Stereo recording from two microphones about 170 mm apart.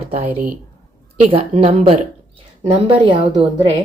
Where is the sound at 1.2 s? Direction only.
35° right (ahead or behind).